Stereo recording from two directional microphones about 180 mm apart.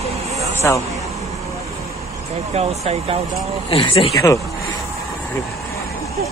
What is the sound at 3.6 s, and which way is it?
Speech, 30° left (ahead or behind).